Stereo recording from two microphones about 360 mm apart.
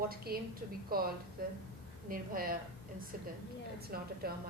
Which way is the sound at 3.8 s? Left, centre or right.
Right.